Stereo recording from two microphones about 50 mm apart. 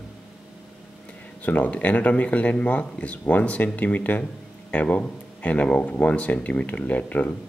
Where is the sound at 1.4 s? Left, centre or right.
Left.